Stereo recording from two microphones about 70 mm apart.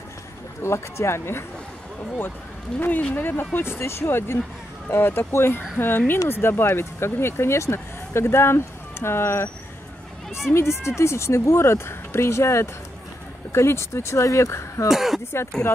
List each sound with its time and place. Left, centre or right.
0.6 s speech: left
2.8 s speech: left
10.5 s speech: left
14.9 s speech: centre